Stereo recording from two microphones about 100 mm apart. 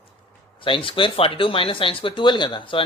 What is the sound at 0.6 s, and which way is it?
Speech, 60° left (ahead or behind).